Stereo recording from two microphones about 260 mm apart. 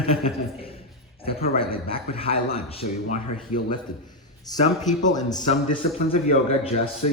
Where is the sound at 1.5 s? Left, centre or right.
Left.